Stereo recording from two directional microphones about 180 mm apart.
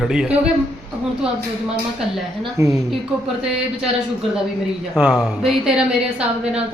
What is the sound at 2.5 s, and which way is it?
Speech, 15° right (ahead or behind).